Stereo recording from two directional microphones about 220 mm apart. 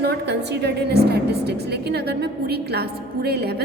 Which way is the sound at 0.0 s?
50° right (ahead or behind).